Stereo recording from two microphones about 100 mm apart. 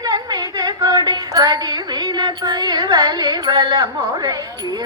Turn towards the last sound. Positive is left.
turn(degrees=-40)  # may be behind; listen again after turning